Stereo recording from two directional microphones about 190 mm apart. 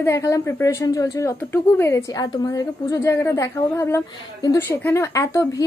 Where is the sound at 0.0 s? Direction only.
15° left (ahead or behind).